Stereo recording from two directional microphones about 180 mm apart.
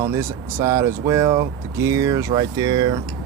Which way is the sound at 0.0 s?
15° right (ahead or behind).